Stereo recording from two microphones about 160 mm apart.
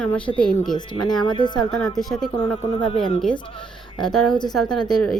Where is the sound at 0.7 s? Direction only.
30° left (ahead or behind).